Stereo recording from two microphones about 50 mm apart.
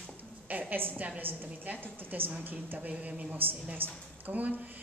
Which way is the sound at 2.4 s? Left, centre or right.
Right.